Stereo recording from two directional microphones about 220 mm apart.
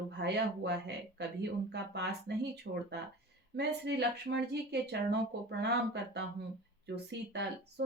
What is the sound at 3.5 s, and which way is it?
Speech, 50° right (ahead or behind).